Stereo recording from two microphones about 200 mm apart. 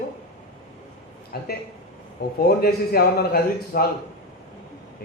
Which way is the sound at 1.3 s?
50° left (ahead or behind).